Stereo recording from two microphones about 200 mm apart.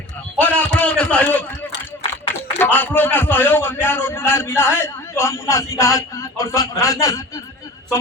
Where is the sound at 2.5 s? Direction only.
10° left (ahead or behind).